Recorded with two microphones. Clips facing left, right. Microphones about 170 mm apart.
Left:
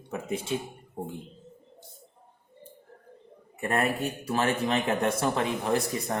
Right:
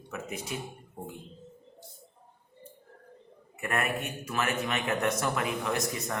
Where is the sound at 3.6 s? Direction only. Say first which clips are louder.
Left 4 dB; 30° left (ahead or behind).